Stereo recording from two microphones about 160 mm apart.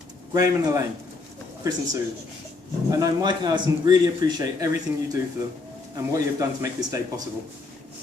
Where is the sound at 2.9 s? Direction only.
25° right (ahead or behind).